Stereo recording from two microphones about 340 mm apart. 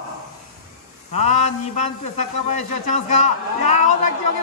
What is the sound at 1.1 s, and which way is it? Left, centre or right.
A man's voice, centre.